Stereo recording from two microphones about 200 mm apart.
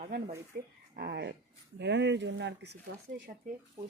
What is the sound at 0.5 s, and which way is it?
A woman's voice, 50° right (ahead or behind).